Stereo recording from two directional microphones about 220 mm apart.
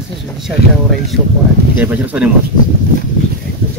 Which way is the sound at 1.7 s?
5° right (ahead or behind).